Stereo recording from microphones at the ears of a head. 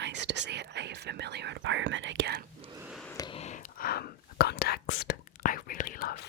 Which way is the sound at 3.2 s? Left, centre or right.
Left.